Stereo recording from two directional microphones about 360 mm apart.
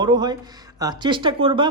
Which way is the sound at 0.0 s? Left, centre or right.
Centre.